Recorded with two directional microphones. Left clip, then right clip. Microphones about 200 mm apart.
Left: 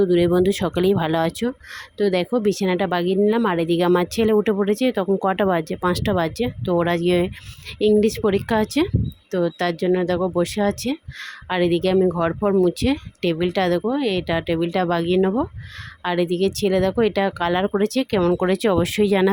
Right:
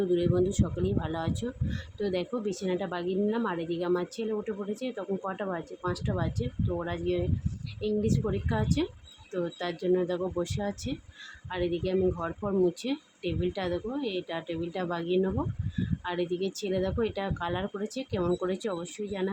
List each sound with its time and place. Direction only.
0.0 s speech: 40° left (ahead or behind)